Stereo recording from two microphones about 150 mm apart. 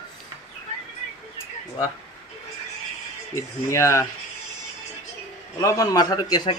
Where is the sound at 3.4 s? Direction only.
20° left (ahead or behind).